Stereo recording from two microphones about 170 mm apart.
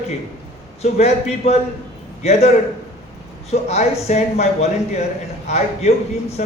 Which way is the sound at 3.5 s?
40° left (ahead or behind).